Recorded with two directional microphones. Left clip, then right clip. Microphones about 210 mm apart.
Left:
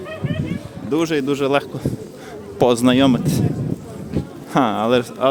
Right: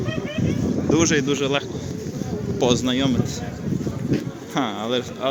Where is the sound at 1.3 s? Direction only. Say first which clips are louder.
Left 4 dB; 35° left (ahead or behind).